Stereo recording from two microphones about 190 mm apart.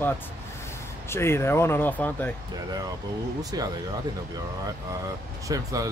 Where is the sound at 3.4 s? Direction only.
20° right (ahead or behind).